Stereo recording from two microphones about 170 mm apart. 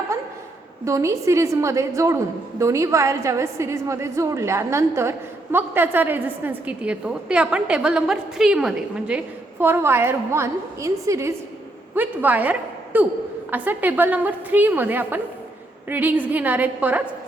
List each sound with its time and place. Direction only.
0.9 s a woman's voice: 15° right (ahead or behind)